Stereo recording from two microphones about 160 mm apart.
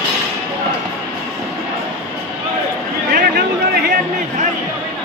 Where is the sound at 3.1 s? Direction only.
70° right (ahead or behind).